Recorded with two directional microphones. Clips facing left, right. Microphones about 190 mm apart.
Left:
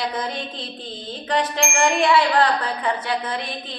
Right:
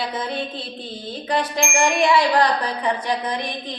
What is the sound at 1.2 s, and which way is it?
A woman's voice, 10° right (ahead or behind).